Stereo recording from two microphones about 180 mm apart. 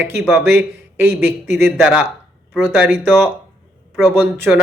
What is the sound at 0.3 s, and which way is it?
A man's voice, 10° right (ahead or behind).